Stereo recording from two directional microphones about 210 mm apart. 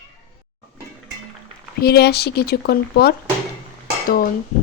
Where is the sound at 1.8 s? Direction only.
50° left (ahead or behind).